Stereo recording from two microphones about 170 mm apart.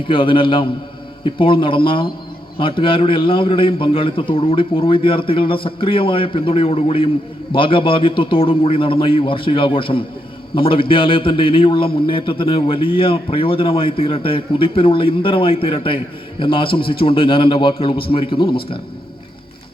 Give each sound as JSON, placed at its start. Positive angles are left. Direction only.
{"t": 0.1, "sound": "a man's voice", "side_deg": 30}